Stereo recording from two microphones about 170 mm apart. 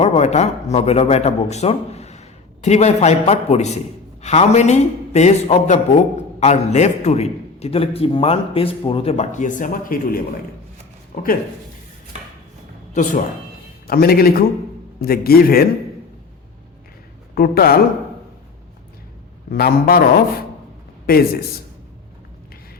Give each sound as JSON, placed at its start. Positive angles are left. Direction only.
{"t": 0.0, "sound": "a man's voice", "side_deg": 40}
{"t": 12.9, "sound": "speech", "side_deg": 50}
{"t": 13.8, "sound": "speech", "side_deg": 65}
{"t": 17.3, "sound": "speech", "side_deg": 60}
{"t": 19.5, "sound": "speech", "side_deg": 60}